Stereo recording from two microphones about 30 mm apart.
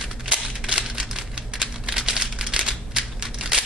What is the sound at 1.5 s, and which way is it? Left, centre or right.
Crumpling, centre.